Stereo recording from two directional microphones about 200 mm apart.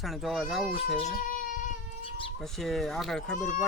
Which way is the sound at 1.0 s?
40° left (ahead or behind).